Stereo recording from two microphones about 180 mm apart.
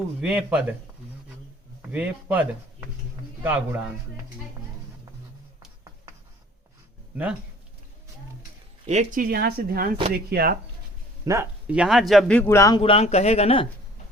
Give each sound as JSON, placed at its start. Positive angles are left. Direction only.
{"t": 0.2, "sound": "a man's voice", "side_deg": -5}
{"t": 1.9, "sound": "speech", "side_deg": -10}
{"t": 8.9, "sound": "speech", "side_deg": -45}
{"t": 11.3, "sound": "speech", "side_deg": -15}
{"t": 11.8, "sound": "a man's voice", "side_deg": 0}
{"t": 12.8, "sound": "speech", "side_deg": 35}